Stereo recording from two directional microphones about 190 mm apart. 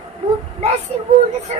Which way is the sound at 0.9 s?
35° right (ahead or behind).